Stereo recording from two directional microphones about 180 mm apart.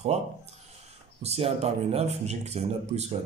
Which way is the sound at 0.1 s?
35° right (ahead or behind).